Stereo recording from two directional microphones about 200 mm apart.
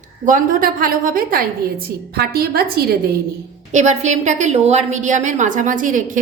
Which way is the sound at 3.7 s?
35° right (ahead or behind).